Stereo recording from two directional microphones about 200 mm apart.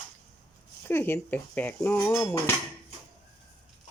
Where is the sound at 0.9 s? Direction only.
10° left (ahead or behind).